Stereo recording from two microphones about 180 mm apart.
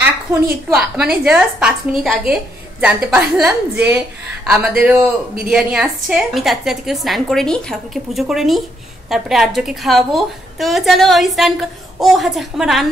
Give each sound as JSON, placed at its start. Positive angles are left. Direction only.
{"t": 0.3, "sound": "speech", "side_deg": -15}
{"t": 0.7, "sound": "a woman's voice", "side_deg": -5}